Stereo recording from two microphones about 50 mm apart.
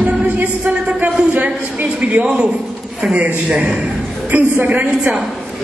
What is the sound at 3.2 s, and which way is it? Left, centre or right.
A woman's voice, right.